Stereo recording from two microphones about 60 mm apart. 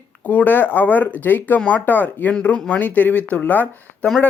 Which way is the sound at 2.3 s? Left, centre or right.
Centre.